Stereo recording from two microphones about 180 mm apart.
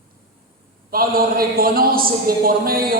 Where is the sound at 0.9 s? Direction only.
55° right (ahead or behind).